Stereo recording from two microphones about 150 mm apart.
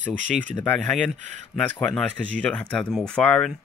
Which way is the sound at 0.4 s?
10° left (ahead or behind).